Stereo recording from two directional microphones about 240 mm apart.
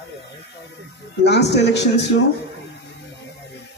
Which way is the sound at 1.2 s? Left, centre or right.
Left.